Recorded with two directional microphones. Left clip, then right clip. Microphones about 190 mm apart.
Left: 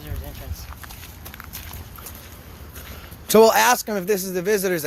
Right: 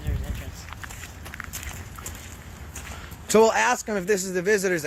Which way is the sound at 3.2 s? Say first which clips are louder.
Left 5 dB; 25° left (ahead or behind).